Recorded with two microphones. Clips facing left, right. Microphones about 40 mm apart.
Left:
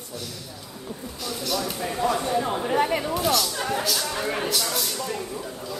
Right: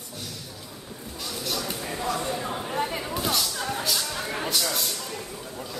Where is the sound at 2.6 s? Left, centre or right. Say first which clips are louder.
Left 6 dB; left.